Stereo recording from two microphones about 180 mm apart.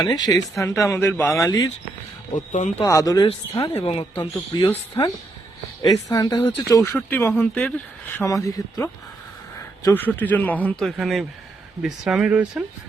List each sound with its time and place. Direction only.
0.1 s speech: 20° left (ahead or behind)
2.3 s speech: 45° left (ahead or behind)
2.8 s speech: 20° left (ahead or behind)
6.1 s speech: 20° left (ahead or behind); by 12.6 s 5° right (ahead or behind)